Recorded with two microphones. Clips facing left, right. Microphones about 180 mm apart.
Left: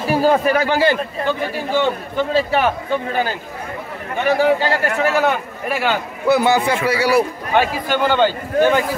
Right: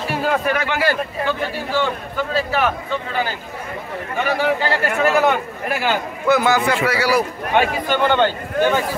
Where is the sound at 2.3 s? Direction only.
30° left (ahead or behind).